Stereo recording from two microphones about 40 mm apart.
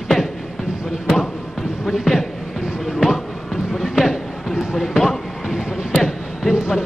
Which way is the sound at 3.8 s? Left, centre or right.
Centre.